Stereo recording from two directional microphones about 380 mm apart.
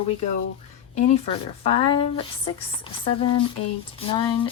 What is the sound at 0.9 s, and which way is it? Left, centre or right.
Speech, centre.